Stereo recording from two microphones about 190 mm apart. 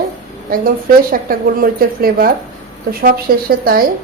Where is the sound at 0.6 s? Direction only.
50° right (ahead or behind).